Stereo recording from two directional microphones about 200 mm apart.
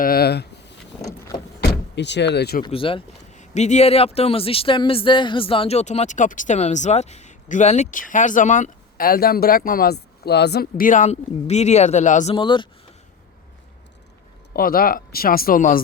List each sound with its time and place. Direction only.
0.0 s a sound: 50° left (ahead or behind)
1.0 s vehicle: 15° left (ahead or behind)
1.6 s speech: 60° left (ahead or behind)
2.6 s speech: 25° left (ahead or behind)
12.3 s speech: 25° left (ahead or behind)
14.5 s speech: 45° left (ahead or behind)